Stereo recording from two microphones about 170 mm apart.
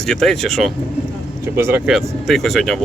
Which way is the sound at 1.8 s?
Centre (ahead or behind).